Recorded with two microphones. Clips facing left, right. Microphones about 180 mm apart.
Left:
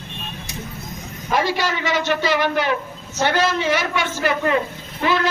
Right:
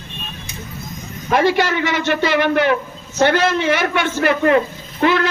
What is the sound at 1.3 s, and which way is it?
A man's voice, 60° right (ahead or behind).